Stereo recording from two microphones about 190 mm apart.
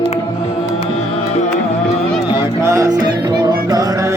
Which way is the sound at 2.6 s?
15° right (ahead or behind).